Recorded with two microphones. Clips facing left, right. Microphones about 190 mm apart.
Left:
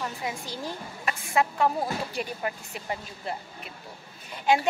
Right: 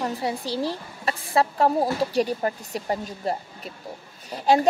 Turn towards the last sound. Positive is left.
turn(degrees=-35)  # may be behind; listen again after turning